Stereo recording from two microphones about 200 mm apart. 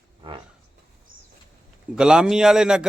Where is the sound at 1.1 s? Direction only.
45° right (ahead or behind).